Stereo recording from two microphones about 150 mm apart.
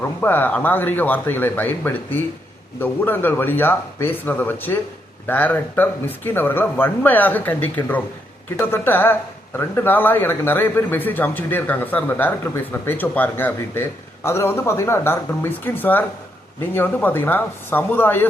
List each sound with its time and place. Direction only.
0.2 s speech: 15° left (ahead or behind)